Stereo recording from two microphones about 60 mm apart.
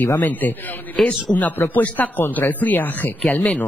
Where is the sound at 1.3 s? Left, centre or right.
Left.